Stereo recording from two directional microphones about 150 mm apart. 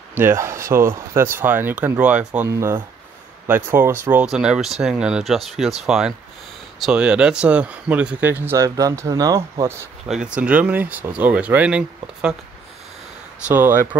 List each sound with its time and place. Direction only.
0.1 s speech: 15° right (ahead or behind)
10.0 s speech: 5° right (ahead or behind)
13.5 s speech: 15° right (ahead or behind)